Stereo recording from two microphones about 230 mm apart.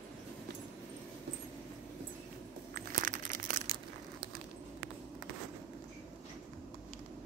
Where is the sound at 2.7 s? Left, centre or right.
Right.